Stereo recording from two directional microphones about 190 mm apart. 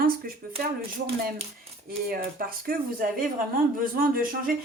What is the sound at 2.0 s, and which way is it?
A woman's voice, 50° right (ahead or behind).